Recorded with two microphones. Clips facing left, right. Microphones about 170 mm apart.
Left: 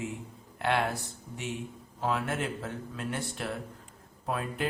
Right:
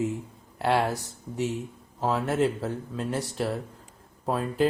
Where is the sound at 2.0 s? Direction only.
35° right (ahead or behind).